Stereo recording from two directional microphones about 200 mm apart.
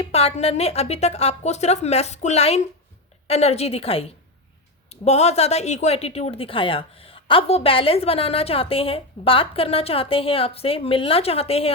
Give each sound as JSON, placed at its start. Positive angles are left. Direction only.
{"t": 0.0, "sound": "a woman's voice", "side_deg": 30}